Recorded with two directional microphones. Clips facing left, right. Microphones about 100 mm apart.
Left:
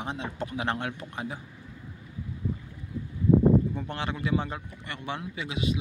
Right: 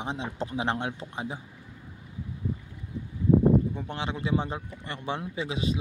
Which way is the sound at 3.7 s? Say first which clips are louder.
Even; 15° right (ahead or behind).